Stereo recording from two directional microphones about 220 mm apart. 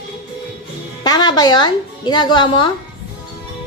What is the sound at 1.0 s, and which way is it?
A woman's voice, 20° left (ahead or behind).